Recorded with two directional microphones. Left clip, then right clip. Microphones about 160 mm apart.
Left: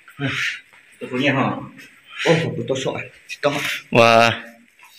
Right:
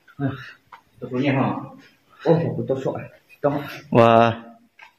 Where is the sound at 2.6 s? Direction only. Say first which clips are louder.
Left 1 dB; 40° right (ahead or behind).